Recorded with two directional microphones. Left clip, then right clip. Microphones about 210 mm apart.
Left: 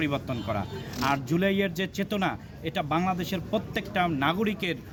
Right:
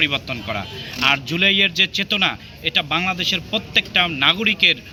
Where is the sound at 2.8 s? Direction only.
5° left (ahead or behind).